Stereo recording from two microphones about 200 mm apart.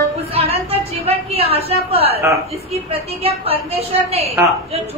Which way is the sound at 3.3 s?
30° right (ahead or behind).